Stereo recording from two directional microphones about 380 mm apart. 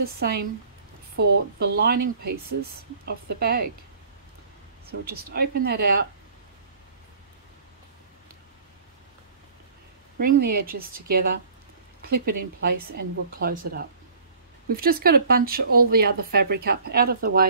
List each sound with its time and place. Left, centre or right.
0.0 s speech: right
3.1 s speech: right
5.1 s speech: right
10.1 s speech: right